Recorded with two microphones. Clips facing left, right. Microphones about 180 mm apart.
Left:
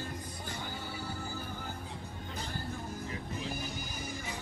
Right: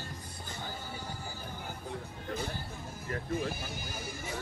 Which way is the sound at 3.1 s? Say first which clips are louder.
Right 9 dB; 55° right (ahead or behind).